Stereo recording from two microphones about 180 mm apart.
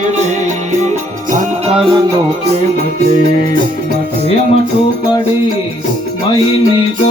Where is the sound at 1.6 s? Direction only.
30° right (ahead or behind).